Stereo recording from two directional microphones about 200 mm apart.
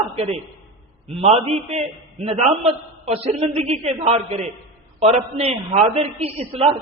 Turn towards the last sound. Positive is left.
turn(degrees=-30)  # may be behind; listen again after turning